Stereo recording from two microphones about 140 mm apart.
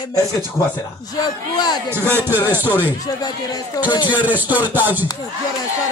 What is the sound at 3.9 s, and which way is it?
Speech, 35° left (ahead or behind).